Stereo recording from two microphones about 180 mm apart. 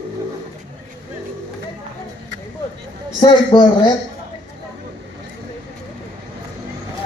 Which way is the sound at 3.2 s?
25° left (ahead or behind).